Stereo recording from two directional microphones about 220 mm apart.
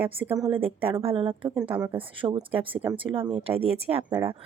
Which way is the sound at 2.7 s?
10° right (ahead or behind).